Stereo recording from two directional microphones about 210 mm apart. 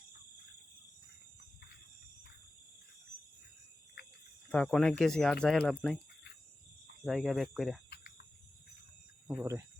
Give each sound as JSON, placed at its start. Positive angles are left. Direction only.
{"t": 4.5, "sound": "speech", "side_deg": 5}
{"t": 7.0, "sound": "speech", "side_deg": 0}
{"t": 7.9, "sound": "cricket", "side_deg": 50}
{"t": 9.3, "sound": "speech", "side_deg": -10}